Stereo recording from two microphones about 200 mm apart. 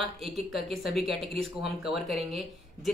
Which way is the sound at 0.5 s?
Centre (ahead or behind).